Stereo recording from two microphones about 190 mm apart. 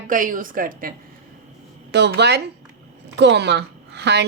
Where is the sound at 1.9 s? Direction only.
65° right (ahead or behind).